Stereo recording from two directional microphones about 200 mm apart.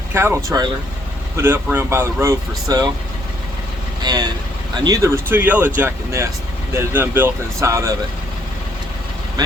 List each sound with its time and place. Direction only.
0.1 s speech: 10° right (ahead or behind)
4.0 s speech: 20° right (ahead or behind)